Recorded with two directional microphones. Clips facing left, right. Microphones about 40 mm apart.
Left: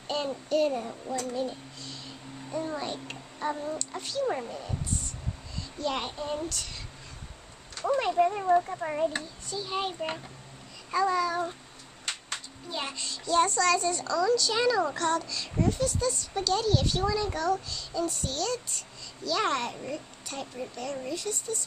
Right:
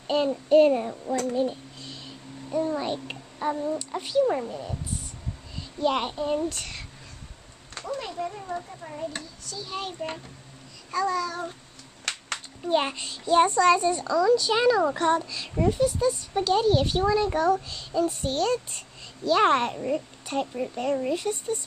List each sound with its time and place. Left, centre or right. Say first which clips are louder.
0.0 s child singing: right 7 dB; centre
0.5 s speech: right 9 dB; right
0.8 s a child's voice: right 5 dB; centre
2.5 s a child's voice: right 6 dB; centre
2.8 s speech: right 5 dB; centre
3.3 s speech: right 4 dB; centre
3.7 s a woman's voice: right 8 dB; centre
4.3 s a woman's voice: right 4 dB; centre
5.6 s a child's voice: right 6 dB; centre
7.8 s speech: left 7 dB; left
9.2 s a child's voice: left 2 dB; left
12.6 s a child's voice: right 11 dB; right
12.9 s speech: right 4 dB; right